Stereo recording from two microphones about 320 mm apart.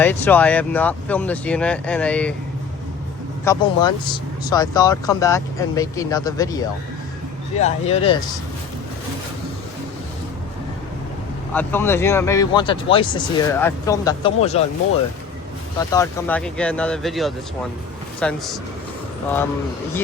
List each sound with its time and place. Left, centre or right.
0.0 s speech: centre
3.4 s speech: centre
11.5 s speech: centre
15.9 s speech: centre